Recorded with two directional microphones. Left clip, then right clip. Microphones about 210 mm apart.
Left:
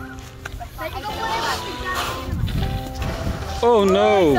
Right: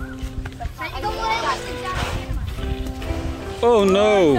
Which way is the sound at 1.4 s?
55° left (ahead or behind).